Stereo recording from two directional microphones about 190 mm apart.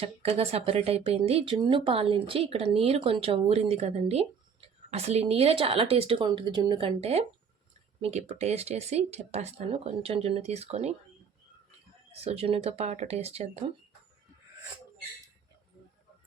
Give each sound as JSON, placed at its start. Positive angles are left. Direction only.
{"t": 0.2, "sound": "speech", "side_deg": -35}
{"t": 12.2, "sound": "speech", "side_deg": -30}